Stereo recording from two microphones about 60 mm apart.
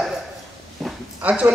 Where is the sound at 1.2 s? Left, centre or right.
Right.